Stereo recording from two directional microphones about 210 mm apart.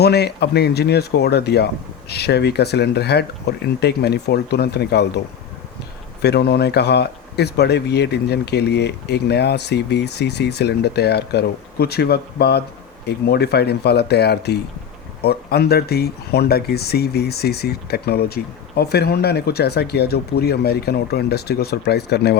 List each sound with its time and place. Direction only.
0.0 s speech: 50° left (ahead or behind)
6.2 s speech: 50° left (ahead or behind)